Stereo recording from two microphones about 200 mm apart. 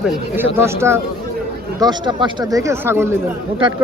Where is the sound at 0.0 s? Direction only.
10° right (ahead or behind).